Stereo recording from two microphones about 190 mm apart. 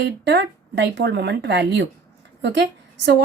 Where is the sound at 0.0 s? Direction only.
70° right (ahead or behind).